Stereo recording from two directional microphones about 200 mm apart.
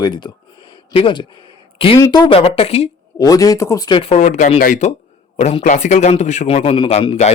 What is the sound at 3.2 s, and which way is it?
Speech, 20° left (ahead or behind).